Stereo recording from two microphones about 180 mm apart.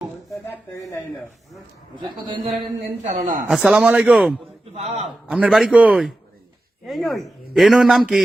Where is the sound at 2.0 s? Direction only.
25° right (ahead or behind).